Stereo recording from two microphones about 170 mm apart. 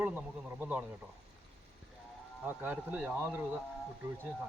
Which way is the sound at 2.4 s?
10° right (ahead or behind).